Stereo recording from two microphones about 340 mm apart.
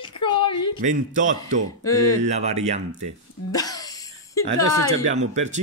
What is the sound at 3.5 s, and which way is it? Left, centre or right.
Cough, centre.